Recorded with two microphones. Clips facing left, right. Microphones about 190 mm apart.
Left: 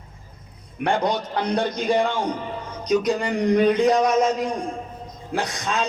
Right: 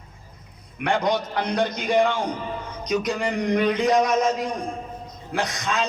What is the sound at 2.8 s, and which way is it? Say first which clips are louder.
A man's voice: left 3 dB; 30° left (ahead or behind).